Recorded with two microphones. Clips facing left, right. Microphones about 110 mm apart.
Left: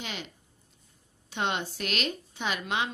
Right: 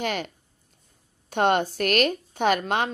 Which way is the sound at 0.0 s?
55° right (ahead or behind).